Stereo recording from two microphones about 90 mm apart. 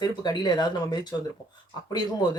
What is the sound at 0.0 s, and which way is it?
Speech, 50° left (ahead or behind).